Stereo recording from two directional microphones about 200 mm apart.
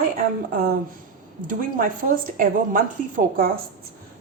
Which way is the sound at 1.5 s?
40° right (ahead or behind).